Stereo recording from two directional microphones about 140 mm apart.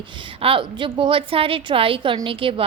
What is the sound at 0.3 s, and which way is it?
A woman's voice, 40° right (ahead or behind).